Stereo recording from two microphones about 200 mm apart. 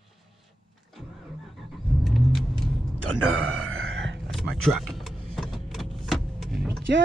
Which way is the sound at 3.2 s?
90° right.